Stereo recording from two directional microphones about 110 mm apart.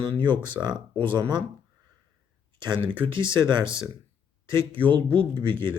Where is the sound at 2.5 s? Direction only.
45° right (ahead or behind).